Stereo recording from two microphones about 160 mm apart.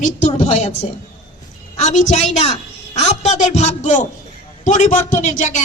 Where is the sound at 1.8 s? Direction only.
45° left (ahead or behind).